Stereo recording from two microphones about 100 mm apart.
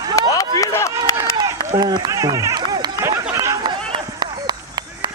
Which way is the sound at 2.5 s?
45° right (ahead or behind).